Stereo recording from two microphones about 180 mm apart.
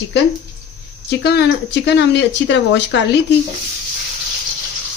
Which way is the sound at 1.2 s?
65° left (ahead or behind).